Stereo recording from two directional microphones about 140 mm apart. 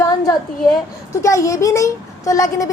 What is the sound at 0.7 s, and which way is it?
A woman's voice, 20° left (ahead or behind).